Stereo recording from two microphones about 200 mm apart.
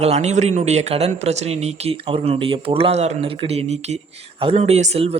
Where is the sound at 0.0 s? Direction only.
35° right (ahead or behind).